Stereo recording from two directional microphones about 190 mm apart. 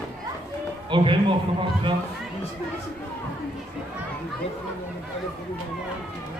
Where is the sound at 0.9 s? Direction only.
25° right (ahead or behind).